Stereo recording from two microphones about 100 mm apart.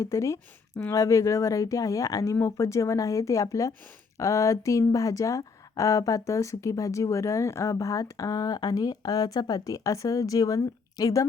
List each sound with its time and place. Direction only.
0.0 s speech: 30° left (ahead or behind)